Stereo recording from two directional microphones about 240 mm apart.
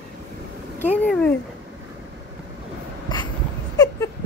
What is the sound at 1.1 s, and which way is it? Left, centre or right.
Speech, centre.